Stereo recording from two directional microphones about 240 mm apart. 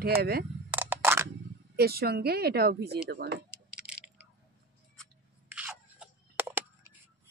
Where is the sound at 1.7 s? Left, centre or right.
Right.